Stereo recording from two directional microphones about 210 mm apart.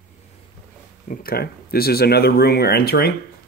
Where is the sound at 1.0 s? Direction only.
40° left (ahead or behind).